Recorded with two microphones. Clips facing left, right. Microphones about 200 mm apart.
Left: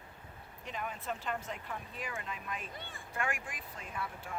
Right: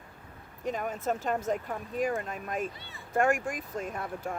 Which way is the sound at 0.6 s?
45° right (ahead or behind).